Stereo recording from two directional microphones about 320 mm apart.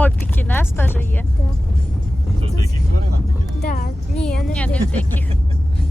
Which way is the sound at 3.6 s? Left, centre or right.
Left.